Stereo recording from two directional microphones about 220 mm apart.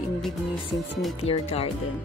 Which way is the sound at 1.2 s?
25° left (ahead or behind).